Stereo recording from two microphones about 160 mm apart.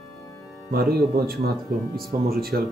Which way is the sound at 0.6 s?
70° right (ahead or behind).